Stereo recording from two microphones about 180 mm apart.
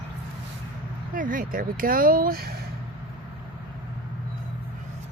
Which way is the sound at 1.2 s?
50° right (ahead or behind).